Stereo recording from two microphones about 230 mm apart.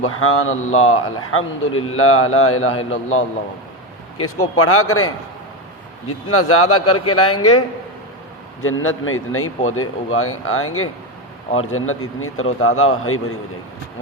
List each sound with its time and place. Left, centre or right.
0.0 s a man's voice: left
8.6 s a man's voice: left